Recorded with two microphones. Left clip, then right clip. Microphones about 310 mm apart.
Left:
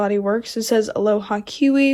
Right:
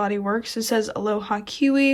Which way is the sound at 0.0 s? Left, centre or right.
Centre.